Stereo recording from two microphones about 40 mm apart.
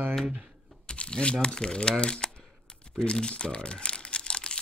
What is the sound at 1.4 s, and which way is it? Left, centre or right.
Speech, centre.